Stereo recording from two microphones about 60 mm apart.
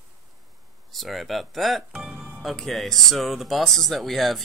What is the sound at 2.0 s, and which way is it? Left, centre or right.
Music, centre.